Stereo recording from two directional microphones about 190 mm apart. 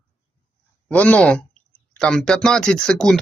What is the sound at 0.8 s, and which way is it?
Speech, 5° left (ahead or behind).